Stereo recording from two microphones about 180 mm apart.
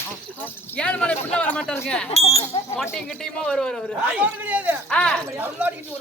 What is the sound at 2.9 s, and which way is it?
A woman's voice, 5° left (ahead or behind).